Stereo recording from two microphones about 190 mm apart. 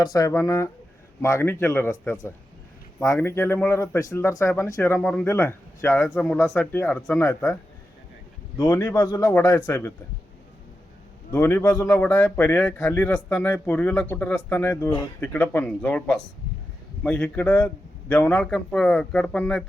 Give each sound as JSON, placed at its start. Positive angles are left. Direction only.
{"t": 0.0, "sound": "speech", "side_deg": 20}
{"t": 6.1, "sound": "speech", "side_deg": 0}
{"t": 8.6, "sound": "speech", "side_deg": 10}
{"t": 11.3, "sound": "speech", "side_deg": 10}